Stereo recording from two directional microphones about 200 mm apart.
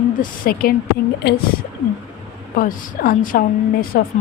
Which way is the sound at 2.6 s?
45° left (ahead or behind).